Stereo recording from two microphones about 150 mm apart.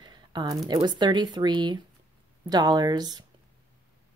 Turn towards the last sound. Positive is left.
turn(degrees=-25)  # may be behind; listen again after turning